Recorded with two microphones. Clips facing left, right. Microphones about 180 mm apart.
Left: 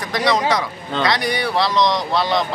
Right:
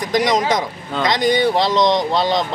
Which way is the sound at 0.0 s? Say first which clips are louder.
Right 2 dB; 20° right (ahead or behind).